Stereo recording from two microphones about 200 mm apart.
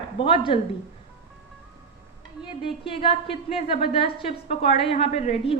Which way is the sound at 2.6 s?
25° left (ahead or behind).